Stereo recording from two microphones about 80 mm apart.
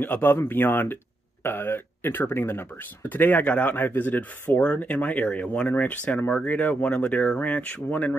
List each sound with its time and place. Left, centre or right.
0.0 s speech: left